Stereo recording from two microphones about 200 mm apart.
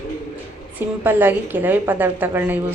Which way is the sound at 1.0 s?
10° right (ahead or behind).